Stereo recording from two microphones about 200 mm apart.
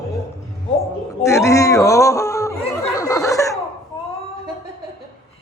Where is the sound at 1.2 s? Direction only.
15° left (ahead or behind).